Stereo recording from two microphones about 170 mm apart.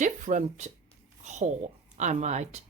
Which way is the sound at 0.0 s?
45° right (ahead or behind).